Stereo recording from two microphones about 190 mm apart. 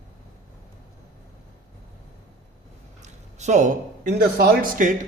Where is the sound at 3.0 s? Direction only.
40° right (ahead or behind).